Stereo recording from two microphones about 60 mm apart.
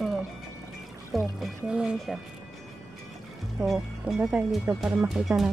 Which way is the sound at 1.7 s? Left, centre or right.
Centre.